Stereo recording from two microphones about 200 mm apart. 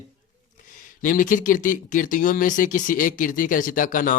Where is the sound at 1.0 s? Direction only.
40° left (ahead or behind).